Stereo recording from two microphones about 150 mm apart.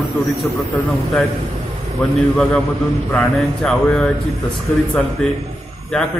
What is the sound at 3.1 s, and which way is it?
Speech, 15° left (ahead or behind).